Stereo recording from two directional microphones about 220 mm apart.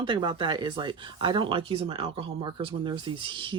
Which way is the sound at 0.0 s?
20° right (ahead or behind).